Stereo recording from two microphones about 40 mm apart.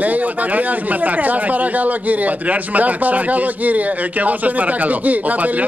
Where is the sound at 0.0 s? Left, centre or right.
Right.